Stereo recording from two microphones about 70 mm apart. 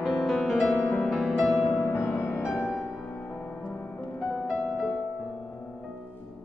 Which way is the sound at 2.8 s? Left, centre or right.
Left.